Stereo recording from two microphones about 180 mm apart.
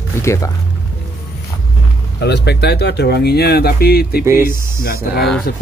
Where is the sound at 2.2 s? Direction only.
65° left (ahead or behind).